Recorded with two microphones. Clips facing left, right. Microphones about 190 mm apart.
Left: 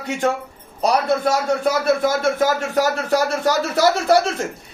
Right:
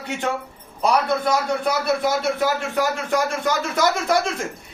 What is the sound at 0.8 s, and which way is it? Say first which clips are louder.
A man's voice: left 2 dB; 40° left (ahead or behind).